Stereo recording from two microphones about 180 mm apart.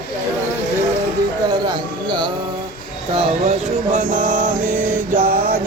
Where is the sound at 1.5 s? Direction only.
25° right (ahead or behind).